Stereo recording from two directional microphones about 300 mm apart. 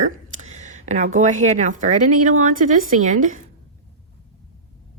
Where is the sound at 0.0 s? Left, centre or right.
Right.